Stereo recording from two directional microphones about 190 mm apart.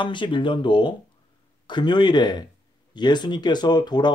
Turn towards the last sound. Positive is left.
turn(degrees=20)  # may be behind; listen again after turning